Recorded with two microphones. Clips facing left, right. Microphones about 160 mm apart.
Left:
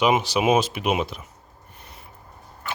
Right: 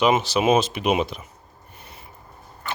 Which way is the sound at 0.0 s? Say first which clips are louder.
Right 1 dB; 15° left (ahead or behind).